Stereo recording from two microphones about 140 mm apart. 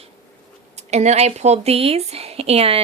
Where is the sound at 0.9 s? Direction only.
55° right (ahead or behind).